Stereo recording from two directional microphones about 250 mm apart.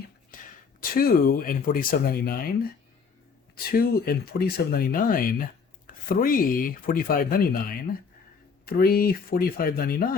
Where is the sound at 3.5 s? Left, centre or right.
Left.